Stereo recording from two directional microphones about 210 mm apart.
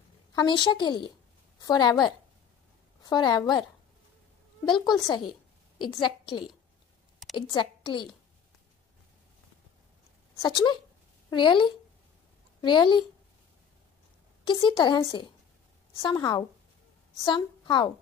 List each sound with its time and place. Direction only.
0.3 s a woman's voice: 20° left (ahead or behind)
4.6 s a woman's voice: 20° left (ahead or behind)
7.5 s a woman's voice: 20° left (ahead or behind)
10.3 s a woman's voice: 20° left (ahead or behind)
14.4 s a woman's voice: 20° left (ahead or behind)